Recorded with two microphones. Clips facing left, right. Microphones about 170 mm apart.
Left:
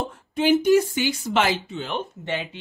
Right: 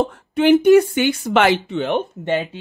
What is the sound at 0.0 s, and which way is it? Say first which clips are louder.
Speech: right 6 dB; 65° right (ahead or behind).